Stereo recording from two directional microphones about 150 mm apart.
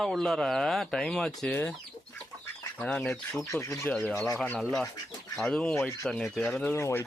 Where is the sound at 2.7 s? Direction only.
5° left (ahead or behind).